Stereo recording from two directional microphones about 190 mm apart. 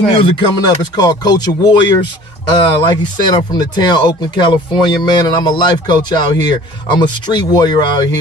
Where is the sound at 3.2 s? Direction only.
20° left (ahead or behind).